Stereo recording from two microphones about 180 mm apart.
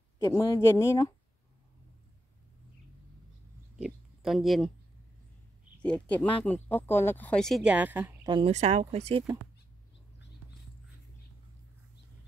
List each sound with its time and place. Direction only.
0.2 s speech: 15° left (ahead or behind)
3.7 s oink: centre (ahead or behind)
5.8 s speech: 5° left (ahead or behind); by 8.1 s 10° right (ahead or behind)
8.2 s speech: 25° right (ahead or behind)